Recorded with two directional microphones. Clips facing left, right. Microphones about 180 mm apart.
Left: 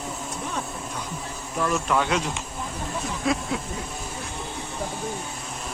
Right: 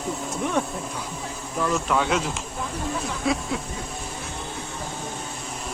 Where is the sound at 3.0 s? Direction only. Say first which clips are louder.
Left 2 dB; centre (ahead or behind).